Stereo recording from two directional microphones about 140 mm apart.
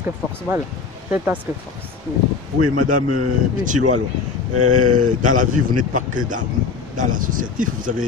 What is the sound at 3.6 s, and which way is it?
Speech, 65° right (ahead or behind).